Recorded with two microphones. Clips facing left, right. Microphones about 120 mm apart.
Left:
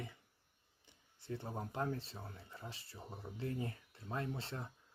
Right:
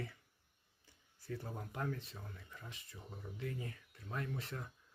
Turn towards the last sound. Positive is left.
turn(degrees=30)  # may be behind; listen again after turning